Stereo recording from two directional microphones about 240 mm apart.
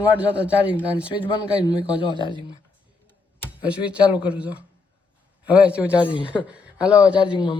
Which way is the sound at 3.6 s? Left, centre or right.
Centre.